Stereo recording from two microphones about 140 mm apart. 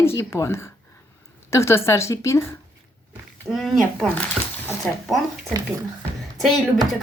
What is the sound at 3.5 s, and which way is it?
Speech, centre (ahead or behind).